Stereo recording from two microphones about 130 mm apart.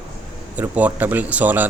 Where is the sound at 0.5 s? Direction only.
10° right (ahead or behind).